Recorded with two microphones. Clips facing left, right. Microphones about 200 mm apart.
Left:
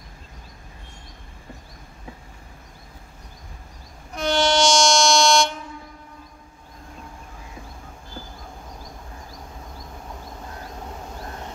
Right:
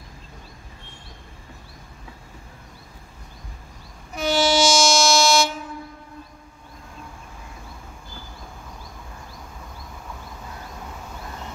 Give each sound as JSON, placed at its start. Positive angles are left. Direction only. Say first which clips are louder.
{"t": 4.1, "sound": "train", "louder": "even", "side_deg": -5}